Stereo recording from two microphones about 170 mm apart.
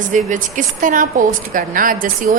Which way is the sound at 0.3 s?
50° right (ahead or behind).